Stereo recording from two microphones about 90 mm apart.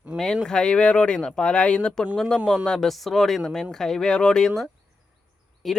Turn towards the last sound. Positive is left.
turn(degrees=0)  # may be behind; listen again after turning